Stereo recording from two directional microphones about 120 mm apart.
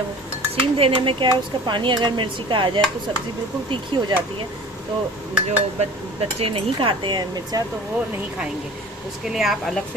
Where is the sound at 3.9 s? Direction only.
40° right (ahead or behind).